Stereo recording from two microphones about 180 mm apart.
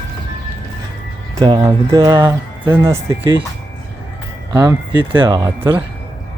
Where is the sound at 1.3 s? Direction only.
25° right (ahead or behind).